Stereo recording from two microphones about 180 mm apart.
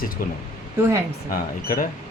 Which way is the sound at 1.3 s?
50° left (ahead or behind).